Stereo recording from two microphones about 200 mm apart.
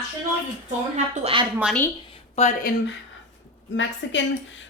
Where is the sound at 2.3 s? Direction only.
35° left (ahead or behind).